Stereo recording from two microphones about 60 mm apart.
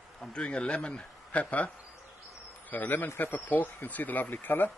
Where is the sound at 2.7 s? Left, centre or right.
Left.